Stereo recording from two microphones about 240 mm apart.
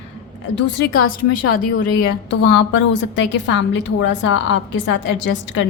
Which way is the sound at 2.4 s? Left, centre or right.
Left.